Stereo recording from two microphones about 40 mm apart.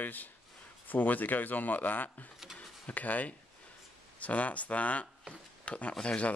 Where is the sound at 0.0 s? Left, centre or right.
Left.